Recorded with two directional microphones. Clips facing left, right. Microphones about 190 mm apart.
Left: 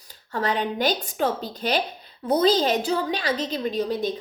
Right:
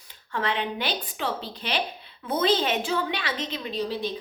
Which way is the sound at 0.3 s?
40° left (ahead or behind).